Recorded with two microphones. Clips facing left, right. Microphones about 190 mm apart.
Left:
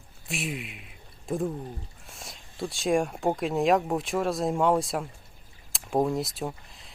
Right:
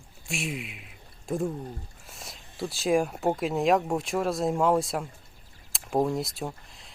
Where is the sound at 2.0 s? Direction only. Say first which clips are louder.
Even; centre (ahead or behind).